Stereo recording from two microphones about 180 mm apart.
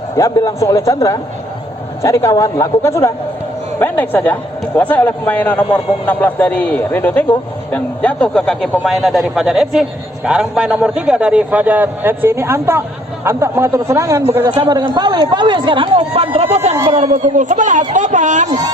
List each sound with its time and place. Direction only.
0.2 s a man's voice: 20° left (ahead or behind); by 18.5 s 45° right (ahead or behind)